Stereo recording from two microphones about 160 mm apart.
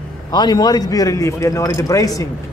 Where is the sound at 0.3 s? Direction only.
25° left (ahead or behind).